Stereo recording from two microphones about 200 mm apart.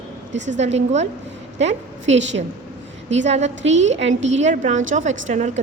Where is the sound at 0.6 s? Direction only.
35° right (ahead or behind).